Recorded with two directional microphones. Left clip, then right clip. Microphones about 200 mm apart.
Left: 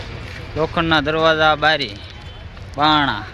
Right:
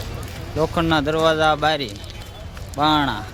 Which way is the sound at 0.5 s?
10° right (ahead or behind).